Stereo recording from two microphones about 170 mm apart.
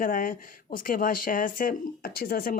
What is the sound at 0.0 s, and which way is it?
Speech, 55° left (ahead or behind).